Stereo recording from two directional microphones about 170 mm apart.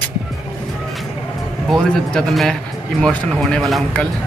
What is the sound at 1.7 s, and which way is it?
Speech, 5° left (ahead or behind).